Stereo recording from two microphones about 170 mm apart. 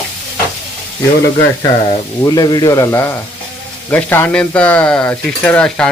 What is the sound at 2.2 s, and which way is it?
A man's voice, 25° left (ahead or behind).